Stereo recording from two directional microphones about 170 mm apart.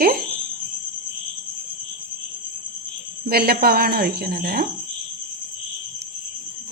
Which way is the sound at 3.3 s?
65° right (ahead or behind).